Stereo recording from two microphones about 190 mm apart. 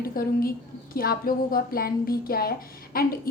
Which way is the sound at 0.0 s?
50° left (ahead or behind).